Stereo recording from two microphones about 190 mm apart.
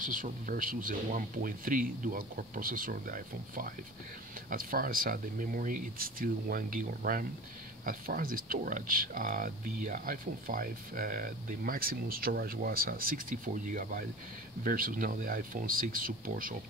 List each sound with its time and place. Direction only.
0.0 s speech: 45° right (ahead or behind)